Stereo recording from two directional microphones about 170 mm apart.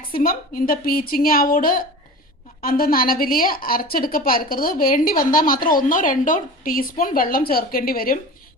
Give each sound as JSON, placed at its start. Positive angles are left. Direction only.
{"t": 0.1, "sound": "a woman's voice", "side_deg": 55}